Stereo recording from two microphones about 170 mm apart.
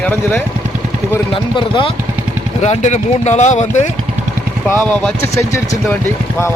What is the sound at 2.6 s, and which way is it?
Speech, 45° left (ahead or behind).